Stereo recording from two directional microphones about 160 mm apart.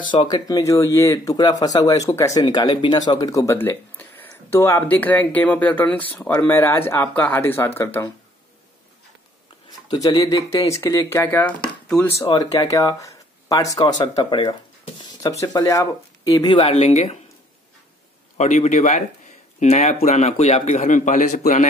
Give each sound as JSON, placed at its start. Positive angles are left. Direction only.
{"t": 0.1, "sound": "speech", "side_deg": 25}
{"t": 10.0, "sound": "speech", "side_deg": 20}
{"t": 12.3, "sound": "speech", "side_deg": 25}
{"t": 16.7, "sound": "speech", "side_deg": 45}
{"t": 18.4, "sound": "speech", "side_deg": 50}